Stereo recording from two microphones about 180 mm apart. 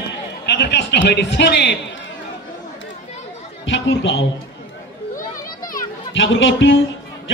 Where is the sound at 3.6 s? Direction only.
85° left.